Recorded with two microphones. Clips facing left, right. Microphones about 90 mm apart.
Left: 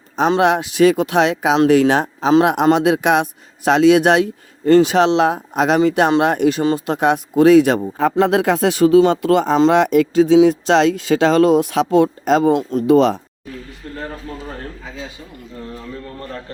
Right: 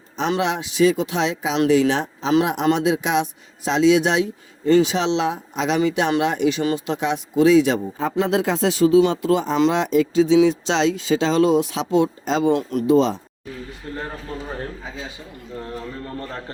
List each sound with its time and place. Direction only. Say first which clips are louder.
0.3 s speech: left 5 dB; 55° left (ahead or behind)
12.9 s speech: left 4 dB; 60° left (ahead or behind)